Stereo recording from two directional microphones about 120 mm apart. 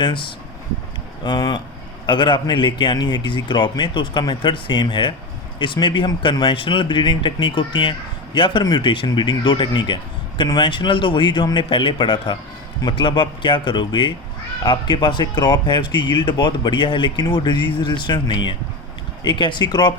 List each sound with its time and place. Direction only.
0.0 s speech: 40° left (ahead or behind)